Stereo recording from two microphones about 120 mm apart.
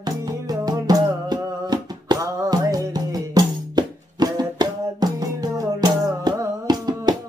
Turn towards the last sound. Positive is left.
turn(degrees=-35)  # may be behind; listen again after turning